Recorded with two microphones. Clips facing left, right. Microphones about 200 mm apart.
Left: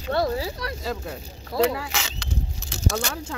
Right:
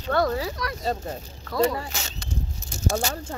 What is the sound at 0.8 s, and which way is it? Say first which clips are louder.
Speech: right 3 dB; 90° left.